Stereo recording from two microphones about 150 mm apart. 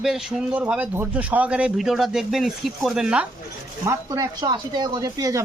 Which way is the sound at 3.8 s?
25° right (ahead or behind).